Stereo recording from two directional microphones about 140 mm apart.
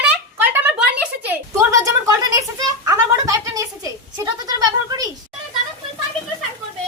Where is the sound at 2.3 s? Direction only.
25° right (ahead or behind).